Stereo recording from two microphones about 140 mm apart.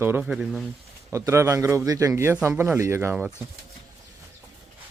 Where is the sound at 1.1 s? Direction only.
20° right (ahead or behind).